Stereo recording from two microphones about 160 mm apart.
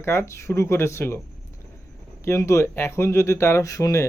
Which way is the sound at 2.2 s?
20° left (ahead or behind).